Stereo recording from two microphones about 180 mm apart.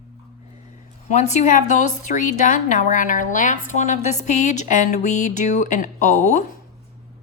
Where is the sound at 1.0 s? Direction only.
40° left (ahead or behind).